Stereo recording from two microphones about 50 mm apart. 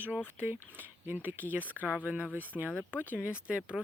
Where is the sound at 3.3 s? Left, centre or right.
Right.